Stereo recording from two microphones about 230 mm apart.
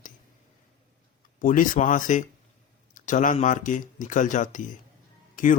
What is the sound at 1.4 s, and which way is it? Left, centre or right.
Speech, left.